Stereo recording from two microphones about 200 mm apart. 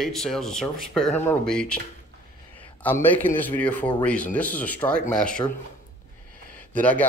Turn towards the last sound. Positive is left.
turn(degrees=10)  # may be behind; listen again after turning